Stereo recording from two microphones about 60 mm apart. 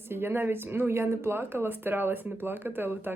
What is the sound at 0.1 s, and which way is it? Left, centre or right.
Speech, right.